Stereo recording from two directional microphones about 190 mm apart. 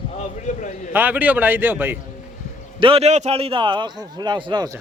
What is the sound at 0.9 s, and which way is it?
A man's voice, 10° right (ahead or behind).